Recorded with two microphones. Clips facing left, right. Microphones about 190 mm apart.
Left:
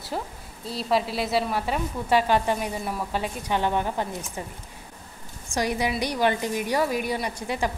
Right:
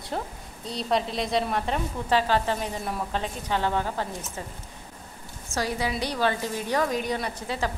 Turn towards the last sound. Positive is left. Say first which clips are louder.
# left 2 dB
turn(degrees=15)  # may be behind; listen again after turning